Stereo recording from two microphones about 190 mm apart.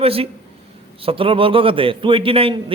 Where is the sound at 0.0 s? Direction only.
30° right (ahead or behind).